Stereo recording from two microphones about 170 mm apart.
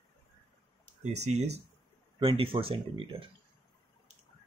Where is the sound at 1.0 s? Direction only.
40° right (ahead or behind).